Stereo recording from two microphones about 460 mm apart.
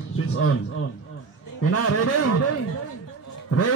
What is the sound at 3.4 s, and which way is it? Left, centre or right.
Speech, left.